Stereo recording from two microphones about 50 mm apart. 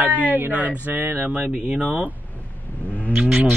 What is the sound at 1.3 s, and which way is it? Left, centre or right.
Speech, right.